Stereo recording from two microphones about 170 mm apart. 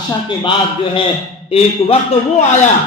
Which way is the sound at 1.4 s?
35° left (ahead or behind).